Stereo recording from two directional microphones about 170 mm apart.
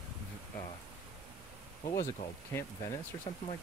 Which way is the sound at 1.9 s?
20° left (ahead or behind).